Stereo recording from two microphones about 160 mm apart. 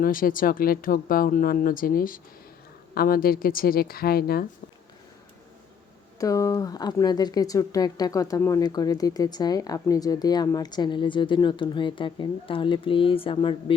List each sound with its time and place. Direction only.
0.0 s speech: 60° left (ahead or behind)
6.1 s speech: 20° left (ahead or behind)